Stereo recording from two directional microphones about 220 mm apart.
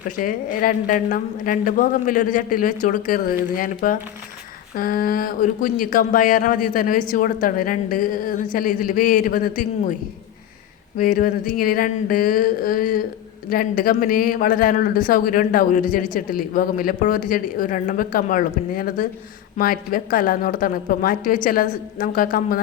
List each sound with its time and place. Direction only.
0.2 s a woman's voice: 40° left (ahead or behind)
10.9 s a woman's voice: 40° left (ahead or behind)